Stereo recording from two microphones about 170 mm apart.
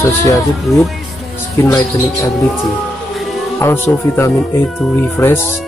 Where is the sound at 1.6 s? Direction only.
10° left (ahead or behind).